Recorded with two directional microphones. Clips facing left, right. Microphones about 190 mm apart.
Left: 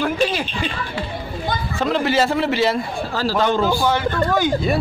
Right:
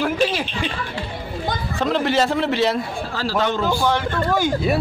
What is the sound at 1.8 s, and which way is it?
A man's voice, centre (ahead or behind).